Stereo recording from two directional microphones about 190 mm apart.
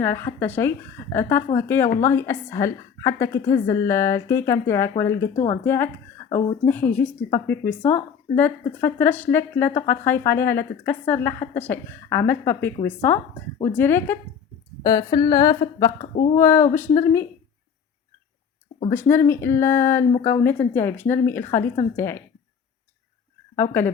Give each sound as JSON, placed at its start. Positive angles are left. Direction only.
{"t": 0.0, "sound": "speech", "side_deg": 10}
{"t": 6.2, "sound": "speech", "side_deg": 25}
{"t": 6.7, "sound": "speech", "side_deg": 10}
{"t": 14.8, "sound": "speech", "side_deg": 20}
{"t": 18.9, "sound": "speech", "side_deg": 15}
{"t": 23.6, "sound": "speech", "side_deg": 10}